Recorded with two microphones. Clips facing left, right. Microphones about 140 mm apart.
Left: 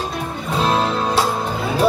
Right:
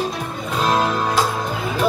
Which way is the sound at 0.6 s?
30° left (ahead or behind).